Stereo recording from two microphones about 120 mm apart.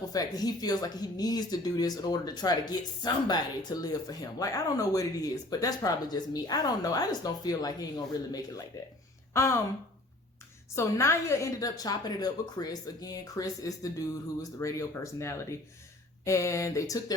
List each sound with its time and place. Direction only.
0.1 s speech: 30° left (ahead or behind)
9.3 s speech: 20° left (ahead or behind)
10.8 s speech: 25° left (ahead or behind)